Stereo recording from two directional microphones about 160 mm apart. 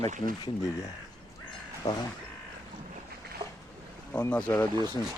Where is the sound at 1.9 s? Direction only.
25° left (ahead or behind).